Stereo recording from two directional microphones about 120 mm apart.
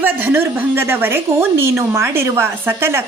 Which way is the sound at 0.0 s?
15° right (ahead or behind).